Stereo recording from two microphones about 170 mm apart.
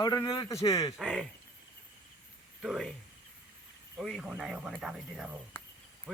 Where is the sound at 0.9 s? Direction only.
5° right (ahead or behind).